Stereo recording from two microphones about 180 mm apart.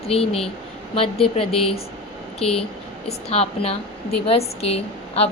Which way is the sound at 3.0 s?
35° left (ahead or behind).